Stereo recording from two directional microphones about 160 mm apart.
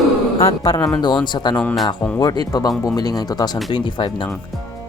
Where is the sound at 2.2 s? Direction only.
25° left (ahead or behind).